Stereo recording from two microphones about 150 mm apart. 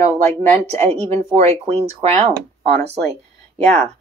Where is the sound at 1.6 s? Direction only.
45° right (ahead or behind).